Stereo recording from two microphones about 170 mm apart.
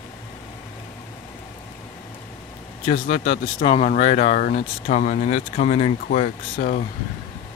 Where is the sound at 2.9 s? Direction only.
45° left (ahead or behind).